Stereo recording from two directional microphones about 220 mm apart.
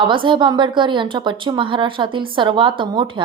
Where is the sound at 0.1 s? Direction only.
20° right (ahead or behind).